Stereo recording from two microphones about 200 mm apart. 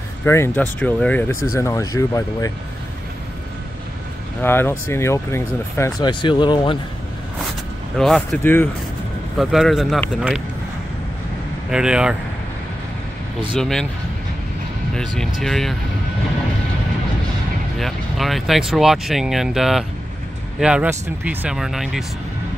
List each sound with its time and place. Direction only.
0.2 s speech: 10° left (ahead or behind)
4.4 s speech: 10° left (ahead or behind)
8.0 s speech: centre (ahead or behind)
11.7 s speech: 5° right (ahead or behind)
13.6 s speech: centre (ahead or behind)
15.4 s speech: centre (ahead or behind)
17.7 s speech: centre (ahead or behind)